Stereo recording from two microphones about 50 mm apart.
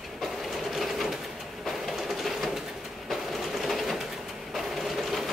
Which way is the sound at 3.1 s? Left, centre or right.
Centre.